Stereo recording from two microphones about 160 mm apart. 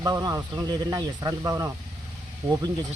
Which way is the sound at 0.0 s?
25° right (ahead or behind).